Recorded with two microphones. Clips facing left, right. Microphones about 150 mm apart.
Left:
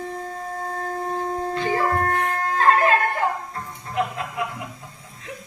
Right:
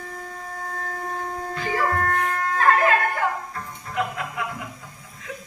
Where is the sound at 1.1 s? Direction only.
25° left (ahead or behind).